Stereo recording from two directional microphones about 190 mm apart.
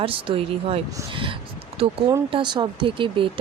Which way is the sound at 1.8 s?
30° right (ahead or behind).